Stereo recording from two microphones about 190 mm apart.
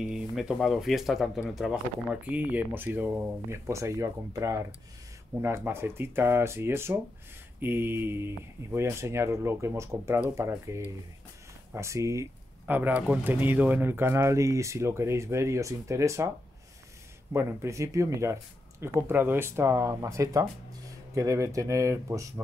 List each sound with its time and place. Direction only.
0.0 s speech: 5° right (ahead or behind)
17.3 s speech: 15° right (ahead or behind)